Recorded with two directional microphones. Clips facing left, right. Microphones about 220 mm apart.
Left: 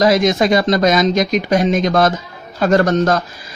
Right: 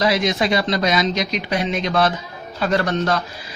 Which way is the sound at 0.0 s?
45° left (ahead or behind).